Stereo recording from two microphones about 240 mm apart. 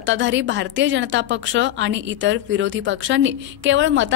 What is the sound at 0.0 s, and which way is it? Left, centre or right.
Speech, right.